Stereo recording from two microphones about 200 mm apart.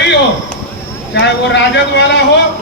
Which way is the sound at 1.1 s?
60° left (ahead or behind).